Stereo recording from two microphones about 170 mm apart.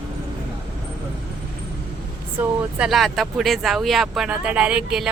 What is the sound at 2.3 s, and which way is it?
Speech, 5° right (ahead or behind).